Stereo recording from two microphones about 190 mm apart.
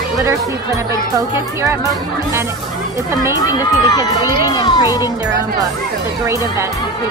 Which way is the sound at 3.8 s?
20° left (ahead or behind).